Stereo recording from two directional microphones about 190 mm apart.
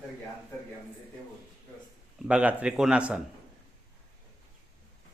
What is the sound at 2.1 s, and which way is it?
A man's voice, 5° right (ahead or behind).